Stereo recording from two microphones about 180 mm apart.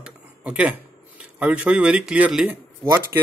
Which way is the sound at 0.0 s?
5° right (ahead or behind).